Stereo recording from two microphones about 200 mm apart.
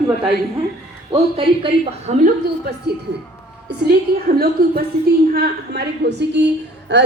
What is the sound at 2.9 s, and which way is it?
A woman's voice, 55° right (ahead or behind).